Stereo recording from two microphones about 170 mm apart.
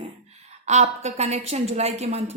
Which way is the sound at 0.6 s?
40° right (ahead or behind).